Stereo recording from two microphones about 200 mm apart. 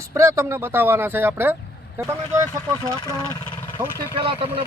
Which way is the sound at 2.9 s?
20° left (ahead or behind).